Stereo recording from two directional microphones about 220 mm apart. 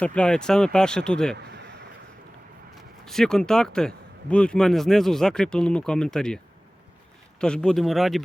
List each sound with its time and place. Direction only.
0.0 s speech: 5° left (ahead or behind)
1.4 s a sound: 50° right (ahead or behind)
2.7 s speech: centre (ahead or behind)